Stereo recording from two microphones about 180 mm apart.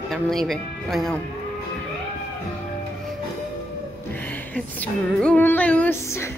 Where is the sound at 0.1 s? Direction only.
Centre (ahead or behind).